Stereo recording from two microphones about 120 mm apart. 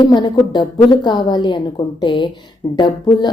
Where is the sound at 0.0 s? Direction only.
40° left (ahead or behind).